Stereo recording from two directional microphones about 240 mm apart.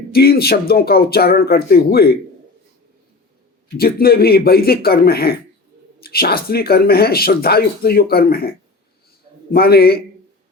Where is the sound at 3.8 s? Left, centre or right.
Left.